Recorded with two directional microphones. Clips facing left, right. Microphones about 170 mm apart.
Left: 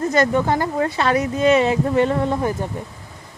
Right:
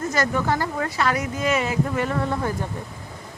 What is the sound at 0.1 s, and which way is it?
Speech, 20° left (ahead or behind).